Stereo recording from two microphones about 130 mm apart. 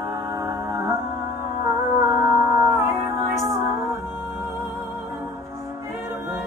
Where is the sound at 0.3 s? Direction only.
20° right (ahead or behind).